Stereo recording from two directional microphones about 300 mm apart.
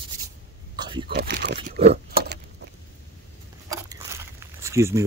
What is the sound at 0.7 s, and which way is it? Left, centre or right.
Vehicle, centre.